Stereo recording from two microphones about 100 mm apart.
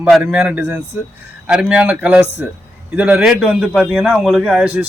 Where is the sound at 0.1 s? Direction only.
10° right (ahead or behind).